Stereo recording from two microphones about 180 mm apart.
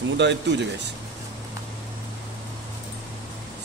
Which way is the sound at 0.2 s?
75° right (ahead or behind).